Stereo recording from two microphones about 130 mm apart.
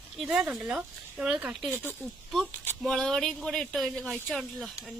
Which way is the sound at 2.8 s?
5° left (ahead or behind).